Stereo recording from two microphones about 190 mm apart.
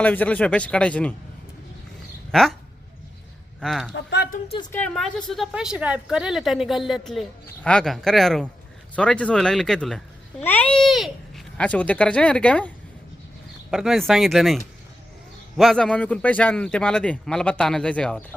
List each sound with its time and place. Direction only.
0.0 s a man's voice: 10° left (ahead or behind)
2.3 s a man's voice: centre (ahead or behind)
3.6 s a man's voice: centre (ahead or behind)
3.9 s speech: 60° left (ahead or behind)
4.7 s a man's voice: 5° left (ahead or behind)